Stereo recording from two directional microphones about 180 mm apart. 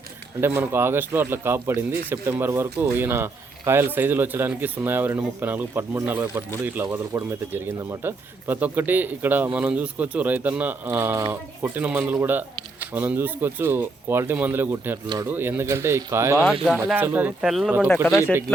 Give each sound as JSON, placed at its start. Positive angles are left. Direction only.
{"t": 0.4, "sound": "speech", "side_deg": -10}